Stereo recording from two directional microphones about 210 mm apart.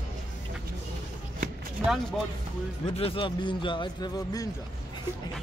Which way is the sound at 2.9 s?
25° left (ahead or behind).